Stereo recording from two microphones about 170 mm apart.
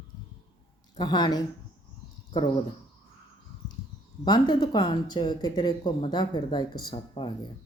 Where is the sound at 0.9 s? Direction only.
25° left (ahead or behind).